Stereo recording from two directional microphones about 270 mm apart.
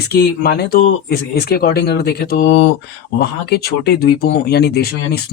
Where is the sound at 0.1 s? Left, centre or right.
Left.